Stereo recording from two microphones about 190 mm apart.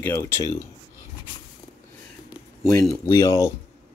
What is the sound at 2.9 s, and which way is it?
Speech, 15° left (ahead or behind).